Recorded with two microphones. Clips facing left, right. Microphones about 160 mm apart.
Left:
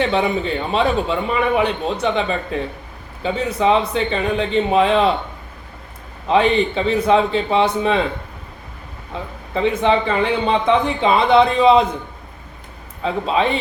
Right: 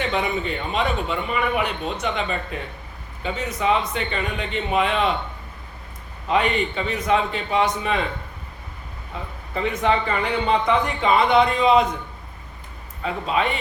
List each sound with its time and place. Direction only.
0.1 s a man's voice: 30° left (ahead or behind)
6.2 s speech: 30° left (ahead or behind)
9.6 s speech: 25° left (ahead or behind)
13.0 s speech: 30° left (ahead or behind)